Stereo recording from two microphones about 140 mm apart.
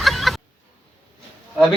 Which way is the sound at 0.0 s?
Centre (ahead or behind).